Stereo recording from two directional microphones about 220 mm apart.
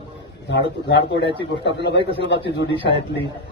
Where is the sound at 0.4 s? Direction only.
50° left (ahead or behind).